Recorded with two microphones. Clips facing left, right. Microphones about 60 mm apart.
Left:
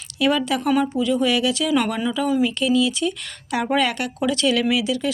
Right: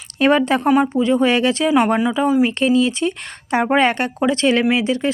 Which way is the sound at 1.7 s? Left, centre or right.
Right.